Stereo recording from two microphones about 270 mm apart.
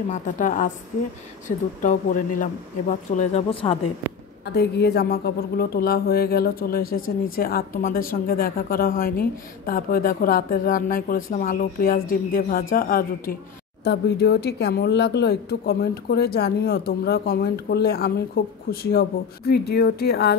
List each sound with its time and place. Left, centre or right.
0.1 s speech: left
1.8 s speech: left
4.0 s a woman's voice: centre
4.5 s speech: left